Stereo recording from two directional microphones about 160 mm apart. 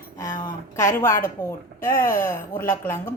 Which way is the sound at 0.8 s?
15° left (ahead or behind).